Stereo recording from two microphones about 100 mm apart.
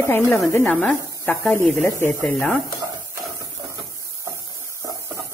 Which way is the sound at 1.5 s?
25° left (ahead or behind).